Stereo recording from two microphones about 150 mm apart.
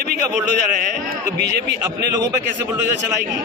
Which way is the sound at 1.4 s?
90° right.